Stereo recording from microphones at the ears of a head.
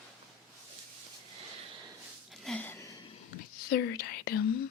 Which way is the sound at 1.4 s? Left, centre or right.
Right.